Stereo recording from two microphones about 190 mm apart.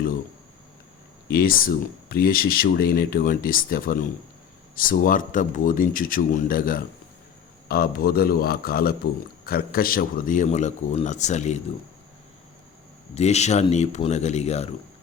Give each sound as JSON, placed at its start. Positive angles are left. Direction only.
{"t": 1.3, "sound": "a man's voice", "side_deg": 50}
{"t": 13.1, "sound": "a man's voice", "side_deg": 35}